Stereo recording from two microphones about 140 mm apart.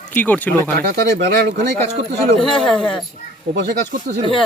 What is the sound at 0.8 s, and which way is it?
Speech, 90° right.